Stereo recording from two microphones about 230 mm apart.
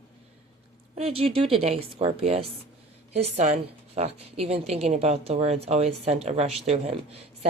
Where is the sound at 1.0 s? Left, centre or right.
Right.